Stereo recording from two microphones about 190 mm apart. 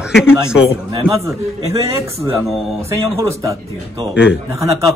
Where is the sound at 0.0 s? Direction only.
5° right (ahead or behind).